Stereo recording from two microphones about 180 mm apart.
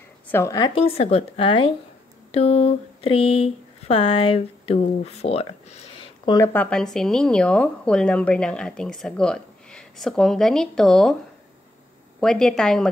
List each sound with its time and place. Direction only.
0.3 s speech: 15° left (ahead or behind); by 6.0 s 35° left (ahead or behind)
6.2 s speech: 20° left (ahead or behind)
6.5 s a woman's voice: 5° left (ahead or behind)
12.2 s a woman's voice: 5° left (ahead or behind)